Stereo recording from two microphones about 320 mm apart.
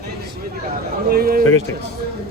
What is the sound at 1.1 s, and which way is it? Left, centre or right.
Speech, right.